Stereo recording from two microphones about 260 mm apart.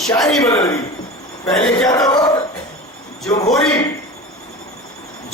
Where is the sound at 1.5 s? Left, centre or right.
Centre.